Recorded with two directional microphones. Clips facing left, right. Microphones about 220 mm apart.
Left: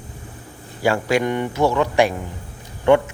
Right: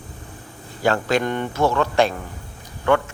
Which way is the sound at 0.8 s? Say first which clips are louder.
Left 1 dB; 10° left (ahead or behind).